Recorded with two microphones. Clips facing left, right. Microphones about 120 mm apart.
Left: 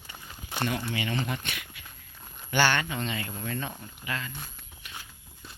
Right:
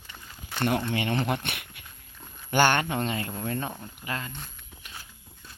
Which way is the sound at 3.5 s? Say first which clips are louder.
Right 3 dB; 40° right (ahead or behind).